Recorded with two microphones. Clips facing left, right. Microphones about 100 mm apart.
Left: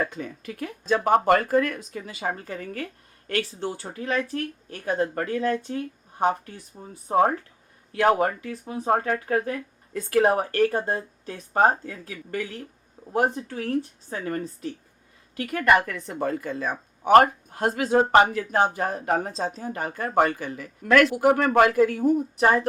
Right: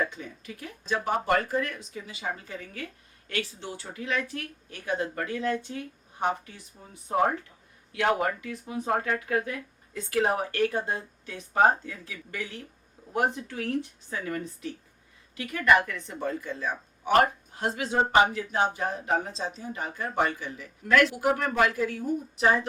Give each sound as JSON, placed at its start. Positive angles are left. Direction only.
{"t": 0.0, "sound": "speech", "side_deg": 50}
{"t": 6.7, "sound": "speech", "side_deg": 35}
{"t": 10.1, "sound": "speech", "side_deg": 50}
{"t": 15.4, "sound": "speech", "side_deg": 50}